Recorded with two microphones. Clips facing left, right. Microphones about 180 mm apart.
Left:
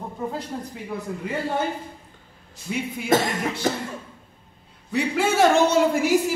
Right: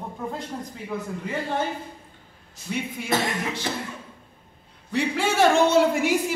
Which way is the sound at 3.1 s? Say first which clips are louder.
Left 5 dB; 45° left (ahead or behind).